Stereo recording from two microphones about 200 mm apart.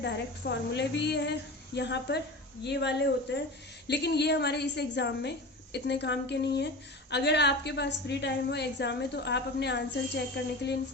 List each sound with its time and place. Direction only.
0.0 s a woman's voice: 60° left (ahead or behind)